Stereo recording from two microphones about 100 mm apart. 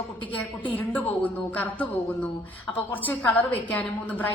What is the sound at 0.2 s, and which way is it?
Speech, 55° left (ahead or behind).